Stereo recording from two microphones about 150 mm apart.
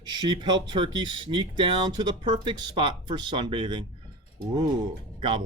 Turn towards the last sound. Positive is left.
turn(degrees=-30)  # may be behind; listen again after turning